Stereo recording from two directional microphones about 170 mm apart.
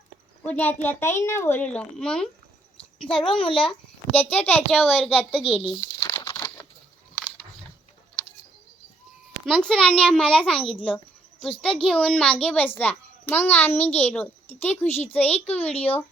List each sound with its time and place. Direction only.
0.4 s a child's voice: 10° left (ahead or behind)
3.0 s a child's voice: 30° left (ahead or behind)
3.7 s a child's voice: 10° left (ahead or behind)
5.7 s crumpling: 15° left (ahead or behind)
9.5 s a child's voice: 5° left (ahead or behind)